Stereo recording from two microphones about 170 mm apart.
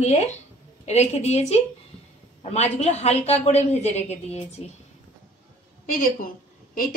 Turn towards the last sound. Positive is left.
turn(degrees=55)  # may be behind; listen again after turning